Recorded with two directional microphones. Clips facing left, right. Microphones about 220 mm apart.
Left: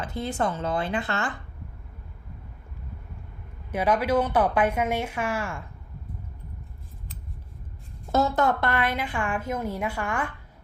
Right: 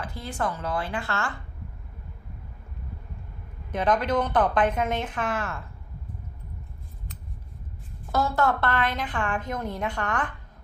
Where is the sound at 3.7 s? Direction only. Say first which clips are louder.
Left 1 dB; 10° left (ahead or behind).